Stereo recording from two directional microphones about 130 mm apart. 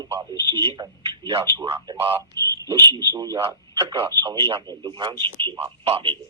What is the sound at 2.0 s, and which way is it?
Speech, 45° right (ahead or behind).